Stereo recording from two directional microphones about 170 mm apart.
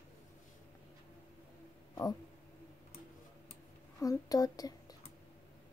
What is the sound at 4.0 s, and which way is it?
Speech, 20° left (ahead or behind).